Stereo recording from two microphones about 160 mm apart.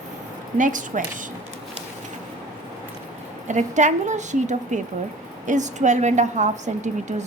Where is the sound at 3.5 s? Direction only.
50° right (ahead or behind).